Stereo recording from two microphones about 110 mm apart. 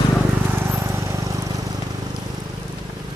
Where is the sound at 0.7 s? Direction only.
25° right (ahead or behind).